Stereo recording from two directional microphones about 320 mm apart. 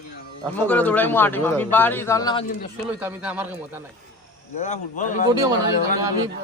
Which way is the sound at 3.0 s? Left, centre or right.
Centre.